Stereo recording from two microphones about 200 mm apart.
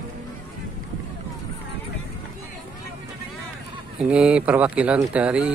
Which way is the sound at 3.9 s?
5° right (ahead or behind).